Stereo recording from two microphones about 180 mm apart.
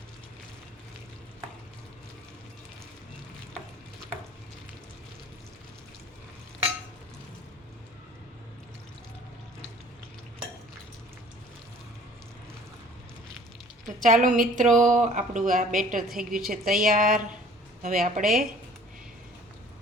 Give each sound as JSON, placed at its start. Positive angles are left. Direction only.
{"t": 14.0, "sound": "speech", "side_deg": -45}